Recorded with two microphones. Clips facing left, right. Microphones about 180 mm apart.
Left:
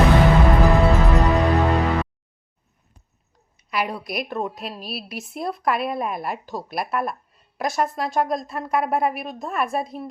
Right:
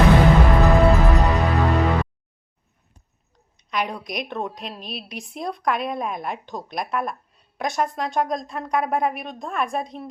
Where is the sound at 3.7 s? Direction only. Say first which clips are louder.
Left 1 dB; 5° left (ahead or behind).